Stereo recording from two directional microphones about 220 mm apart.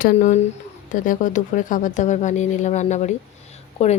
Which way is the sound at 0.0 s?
35° left (ahead or behind).